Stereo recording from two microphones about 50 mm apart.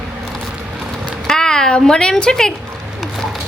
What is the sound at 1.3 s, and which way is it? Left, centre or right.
Speech, centre.